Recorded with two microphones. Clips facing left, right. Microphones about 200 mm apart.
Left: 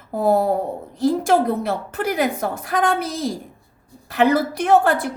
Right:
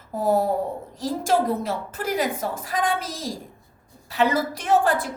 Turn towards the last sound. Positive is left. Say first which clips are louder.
# left 4 dB
turn(degrees=60)  # may be behind; listen again after turning